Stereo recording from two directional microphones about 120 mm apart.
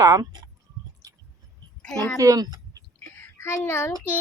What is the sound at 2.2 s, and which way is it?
Speech, 30° right (ahead or behind).